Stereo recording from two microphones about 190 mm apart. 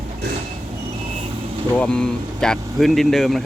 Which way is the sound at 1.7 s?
5° left (ahead or behind).